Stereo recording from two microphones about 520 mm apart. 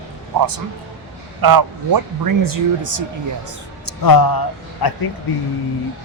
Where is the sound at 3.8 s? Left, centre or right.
Left.